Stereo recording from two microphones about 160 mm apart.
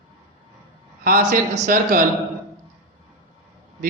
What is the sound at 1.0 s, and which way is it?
A man's voice, 55° right (ahead or behind).